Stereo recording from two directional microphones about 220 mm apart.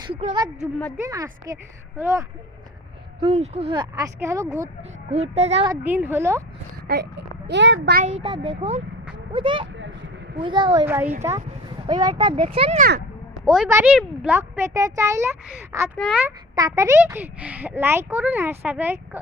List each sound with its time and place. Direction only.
0.1 s speech: 30° right (ahead or behind)
0.9 s a child's voice: 15° right (ahead or behind)
3.2 s speech: 30° right (ahead or behind)
4.8 s speech: 30° right (ahead or behind)
5.8 s a child's voice: 10° right (ahead or behind)
6.8 s a child's voice: 50° right (ahead or behind)
7.9 s speech: 30° right (ahead or behind)
13.3 s a sound: centre (ahead or behind)
13.7 s a child's voice: 10° right (ahead or behind)
16.6 s a child's voice: 15° right (ahead or behind)